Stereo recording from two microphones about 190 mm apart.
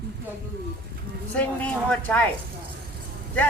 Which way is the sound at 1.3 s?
5° left (ahead or behind).